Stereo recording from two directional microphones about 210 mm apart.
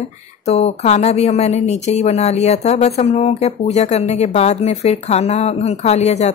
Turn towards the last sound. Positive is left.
turn(degrees=30)  # may be behind; listen again after turning